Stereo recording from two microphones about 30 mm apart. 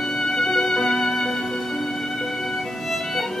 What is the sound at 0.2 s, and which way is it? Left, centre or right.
Music, centre.